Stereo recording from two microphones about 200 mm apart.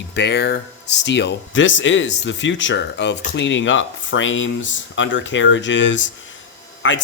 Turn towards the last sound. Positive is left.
turn(degrees=70)  # may be behind; listen again after turning